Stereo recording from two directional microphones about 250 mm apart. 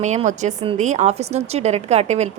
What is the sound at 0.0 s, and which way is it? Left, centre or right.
Speech, right.